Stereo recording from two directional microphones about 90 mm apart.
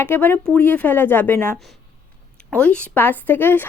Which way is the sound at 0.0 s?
25° left (ahead or behind).